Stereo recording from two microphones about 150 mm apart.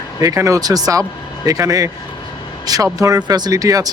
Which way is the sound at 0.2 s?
20° right (ahead or behind).